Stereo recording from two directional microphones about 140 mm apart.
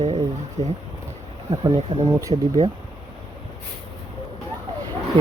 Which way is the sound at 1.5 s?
40° right (ahead or behind).